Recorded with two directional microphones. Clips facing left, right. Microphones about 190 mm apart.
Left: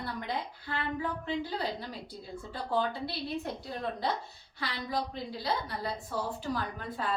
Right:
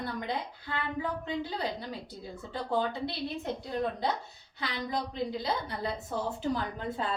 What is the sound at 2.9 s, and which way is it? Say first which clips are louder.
Speech: right 1 dB; 20° right (ahead or behind).